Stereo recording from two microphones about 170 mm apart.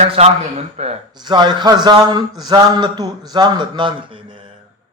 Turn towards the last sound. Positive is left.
turn(degrees=-30)  # may be behind; listen again after turning